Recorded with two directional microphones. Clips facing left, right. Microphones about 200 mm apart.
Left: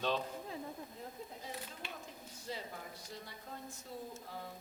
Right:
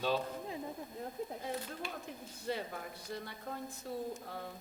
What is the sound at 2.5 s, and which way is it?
A woman's voice, 60° right (ahead or behind).